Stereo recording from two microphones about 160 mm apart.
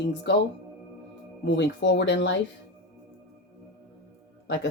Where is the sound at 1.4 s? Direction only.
90° left.